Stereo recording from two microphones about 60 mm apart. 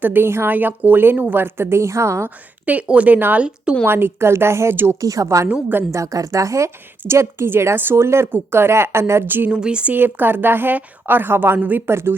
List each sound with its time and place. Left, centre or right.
0.0 s a woman's voice: right
0.5 s a woman's voice: right
1.4 s a woman's voice: right
2.9 s speech: right
3.8 s a woman's voice: right
4.9 s a woman's voice: right
5.5 s speech: right
5.9 s a woman's voice: right
7.1 s a woman's voice: right
9.2 s a woman's voice: right
9.5 s speech: centre
9.9 s a woman's voice: right
11.9 s a woman's voice: right